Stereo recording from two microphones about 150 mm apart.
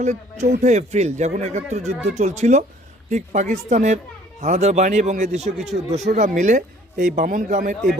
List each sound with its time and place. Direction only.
0.0 s speech: 50° right (ahead or behind)
5.4 s speech: centre (ahead or behind)
5.7 s speech: 45° right (ahead or behind)